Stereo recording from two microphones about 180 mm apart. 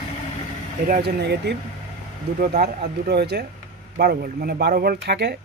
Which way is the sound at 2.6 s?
65° right (ahead or behind).